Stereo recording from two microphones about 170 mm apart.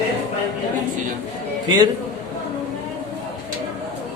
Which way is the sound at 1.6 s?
25° right (ahead or behind).